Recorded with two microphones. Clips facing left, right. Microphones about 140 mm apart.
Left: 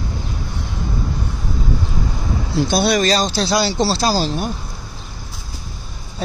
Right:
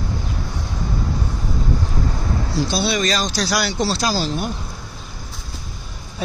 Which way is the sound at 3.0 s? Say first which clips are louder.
Left 4 dB; 35° left (ahead or behind).